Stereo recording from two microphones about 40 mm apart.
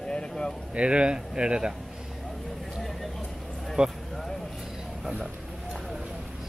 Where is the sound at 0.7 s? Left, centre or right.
Right.